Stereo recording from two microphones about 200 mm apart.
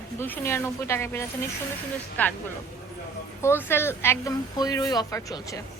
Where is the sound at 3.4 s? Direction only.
10° left (ahead or behind).